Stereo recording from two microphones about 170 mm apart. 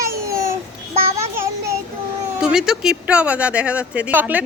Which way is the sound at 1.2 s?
15° right (ahead or behind).